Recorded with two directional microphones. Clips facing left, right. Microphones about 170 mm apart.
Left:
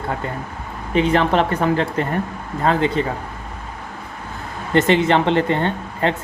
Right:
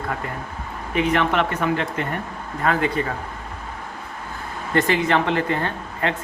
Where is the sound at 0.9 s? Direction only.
30° left (ahead or behind).